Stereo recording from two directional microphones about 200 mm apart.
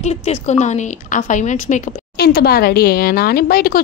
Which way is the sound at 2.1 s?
50° left (ahead or behind).